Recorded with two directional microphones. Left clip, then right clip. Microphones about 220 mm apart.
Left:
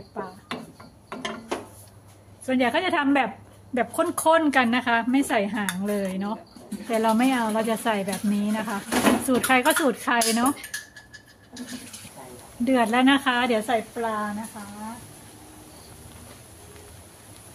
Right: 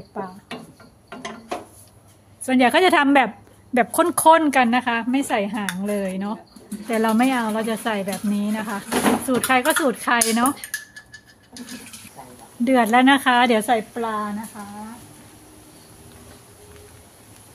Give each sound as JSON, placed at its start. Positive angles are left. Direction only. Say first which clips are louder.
{"t": 0.2, "sound": "a sound", "louder": "right 3 dB", "side_deg": -45}
{"t": 2.4, "sound": "a woman's voice", "louder": "right 7 dB", "side_deg": -50}
{"t": 12.6, "sound": "a woman's voice", "louder": "right 5 dB", "side_deg": -25}